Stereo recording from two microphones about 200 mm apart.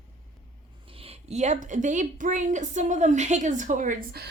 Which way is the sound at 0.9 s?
30° right (ahead or behind).